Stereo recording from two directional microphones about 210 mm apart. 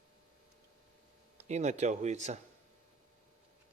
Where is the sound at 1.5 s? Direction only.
35° right (ahead or behind).